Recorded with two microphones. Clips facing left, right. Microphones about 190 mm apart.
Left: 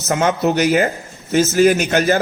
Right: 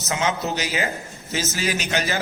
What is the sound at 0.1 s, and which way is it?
A man's voice, 55° left (ahead or behind).